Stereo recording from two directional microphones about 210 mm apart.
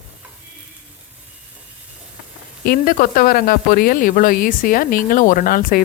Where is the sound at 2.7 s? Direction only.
40° left (ahead or behind).